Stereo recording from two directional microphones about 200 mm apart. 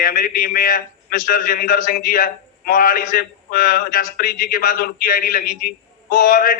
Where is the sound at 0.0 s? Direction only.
45° left (ahead or behind).